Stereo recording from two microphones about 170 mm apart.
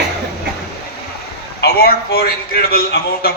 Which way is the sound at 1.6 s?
65° left (ahead or behind).